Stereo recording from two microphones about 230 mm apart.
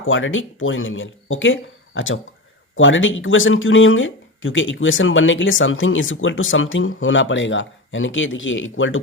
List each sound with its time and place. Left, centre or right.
0.0 s speech: left